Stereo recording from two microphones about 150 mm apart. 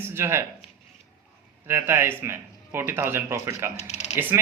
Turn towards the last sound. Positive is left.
turn(degrees=-15)  # may be behind; listen again after turning